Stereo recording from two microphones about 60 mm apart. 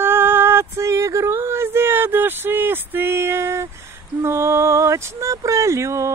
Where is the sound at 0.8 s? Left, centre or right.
Right.